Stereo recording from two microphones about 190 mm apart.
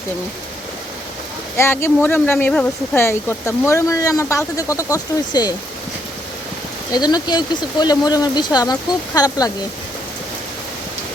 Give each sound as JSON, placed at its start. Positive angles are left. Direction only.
{"t": 1.5, "sound": "speech", "side_deg": 15}
{"t": 6.9, "sound": "speech", "side_deg": 20}